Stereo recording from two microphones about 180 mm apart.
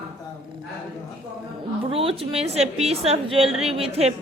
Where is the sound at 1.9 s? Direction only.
30° right (ahead or behind).